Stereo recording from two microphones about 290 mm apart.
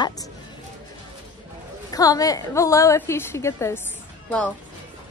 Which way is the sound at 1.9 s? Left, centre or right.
Centre.